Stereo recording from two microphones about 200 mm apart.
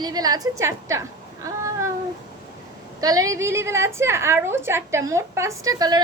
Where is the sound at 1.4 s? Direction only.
15° right (ahead or behind).